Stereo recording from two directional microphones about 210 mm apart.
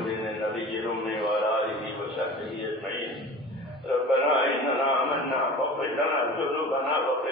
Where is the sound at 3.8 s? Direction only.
Centre (ahead or behind).